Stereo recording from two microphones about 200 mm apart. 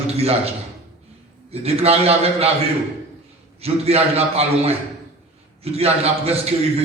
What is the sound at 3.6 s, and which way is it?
A man's voice, 30° right (ahead or behind).